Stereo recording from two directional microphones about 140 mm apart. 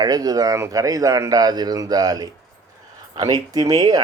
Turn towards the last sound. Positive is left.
turn(degrees=-30)  # may be behind; listen again after turning